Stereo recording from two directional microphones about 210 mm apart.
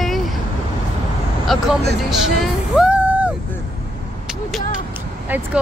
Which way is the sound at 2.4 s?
5° right (ahead or behind).